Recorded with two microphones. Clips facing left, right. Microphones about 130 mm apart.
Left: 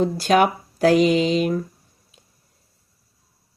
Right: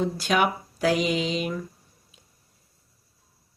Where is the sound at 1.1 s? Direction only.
45° left (ahead or behind).